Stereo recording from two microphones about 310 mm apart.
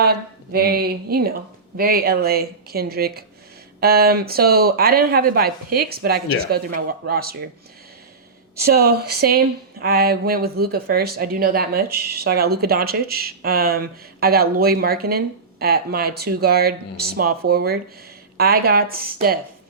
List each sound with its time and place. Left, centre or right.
0.0 s speech: right
8.6 s speech: right